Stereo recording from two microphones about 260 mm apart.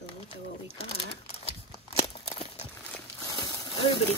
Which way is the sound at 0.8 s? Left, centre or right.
Left.